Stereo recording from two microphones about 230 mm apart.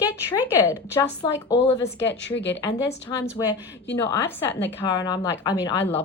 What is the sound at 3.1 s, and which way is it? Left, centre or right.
Speech, centre.